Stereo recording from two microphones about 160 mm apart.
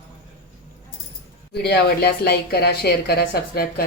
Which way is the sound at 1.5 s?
90° left.